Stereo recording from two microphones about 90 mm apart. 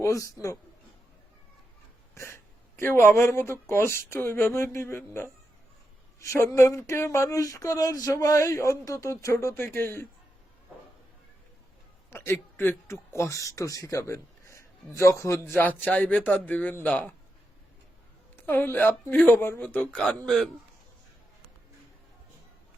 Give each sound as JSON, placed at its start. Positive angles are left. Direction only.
{"t": 0.0, "sound": "speech", "side_deg": 35}
{"t": 2.1, "sound": "a sound", "side_deg": 30}
{"t": 3.3, "sound": "speech", "side_deg": 25}
{"t": 12.1, "sound": "speech", "side_deg": 25}
{"t": 15.6, "sound": "speech", "side_deg": 20}
{"t": 18.3, "sound": "speech", "side_deg": 25}
{"t": 20.2, "sound": "a man's voice", "side_deg": 0}